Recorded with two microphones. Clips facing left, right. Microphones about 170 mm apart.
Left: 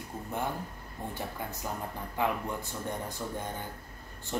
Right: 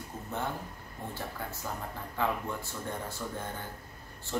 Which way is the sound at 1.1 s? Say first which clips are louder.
Left 1 dB; 15° left (ahead or behind).